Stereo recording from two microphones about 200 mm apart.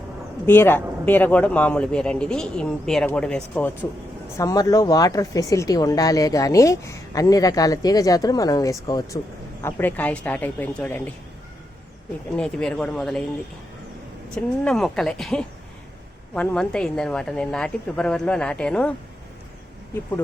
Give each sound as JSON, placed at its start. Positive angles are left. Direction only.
{"t": 0.4, "sound": "speech", "side_deg": 10}
{"t": 4.4, "sound": "speech", "side_deg": 15}
{"t": 12.4, "sound": "speech", "side_deg": 5}
{"t": 14.3, "sound": "speech", "side_deg": 5}